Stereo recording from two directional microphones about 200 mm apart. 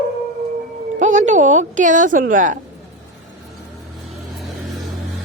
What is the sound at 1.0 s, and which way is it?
A woman's voice, 35° right (ahead or behind).